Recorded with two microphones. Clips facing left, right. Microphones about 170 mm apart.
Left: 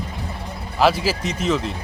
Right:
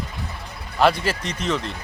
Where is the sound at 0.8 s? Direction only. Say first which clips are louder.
Left 1 dB; 5° left (ahead or behind).